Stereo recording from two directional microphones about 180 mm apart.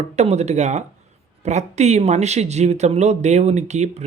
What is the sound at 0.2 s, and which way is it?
Speech, 40° right (ahead or behind).